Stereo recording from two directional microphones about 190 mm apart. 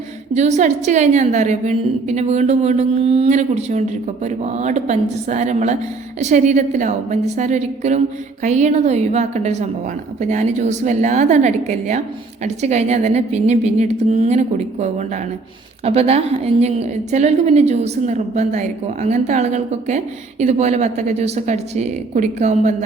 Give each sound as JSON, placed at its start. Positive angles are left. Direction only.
{"t": 0.3, "sound": "a woman's voice", "side_deg": -35}